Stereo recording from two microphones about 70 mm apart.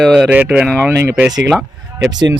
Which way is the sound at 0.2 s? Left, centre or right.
Centre.